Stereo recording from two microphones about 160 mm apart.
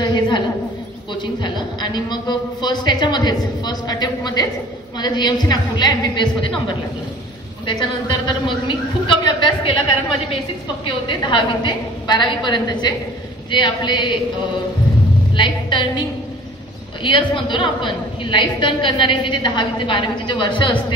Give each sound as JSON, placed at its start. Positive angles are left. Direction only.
{"t": 0.0, "sound": "a sound", "side_deg": 25}
{"t": 1.1, "sound": "a woman's voice", "side_deg": 30}
{"t": 7.6, "sound": "a woman's voice", "side_deg": 30}
{"t": 11.1, "sound": "a woman's voice", "side_deg": 30}
{"t": 15.3, "sound": "a woman's voice", "side_deg": 30}
{"t": 17.0, "sound": "a woman's voice", "side_deg": 30}